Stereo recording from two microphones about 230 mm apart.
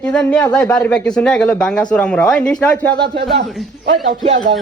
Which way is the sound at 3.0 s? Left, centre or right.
Right.